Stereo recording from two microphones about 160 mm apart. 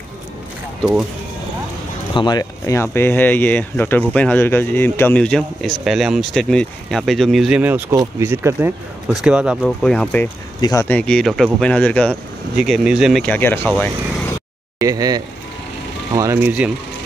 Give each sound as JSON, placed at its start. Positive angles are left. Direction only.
{"t": 2.1, "sound": "speech", "side_deg": 25}
{"t": 9.6, "sound": "speech", "side_deg": 5}
{"t": 10.6, "sound": "speech", "side_deg": 20}
{"t": 10.9, "sound": "speech", "side_deg": 5}
{"t": 13.2, "sound": "speech", "side_deg": 10}
{"t": 14.8, "sound": "speech", "side_deg": -20}